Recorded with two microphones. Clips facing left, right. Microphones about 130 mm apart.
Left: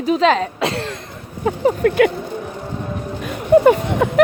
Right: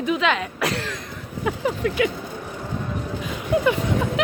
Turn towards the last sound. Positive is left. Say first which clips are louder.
# left 8 dB
turn(degrees=55)  # may be behind; listen again after turning